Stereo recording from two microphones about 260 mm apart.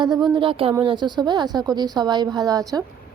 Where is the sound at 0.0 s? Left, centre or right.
Centre.